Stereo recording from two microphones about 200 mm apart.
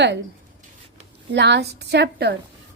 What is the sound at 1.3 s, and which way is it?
A woman's voice, 60° right (ahead or behind).